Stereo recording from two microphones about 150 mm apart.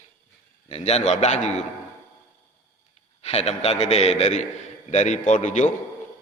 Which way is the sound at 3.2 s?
45° left (ahead or behind).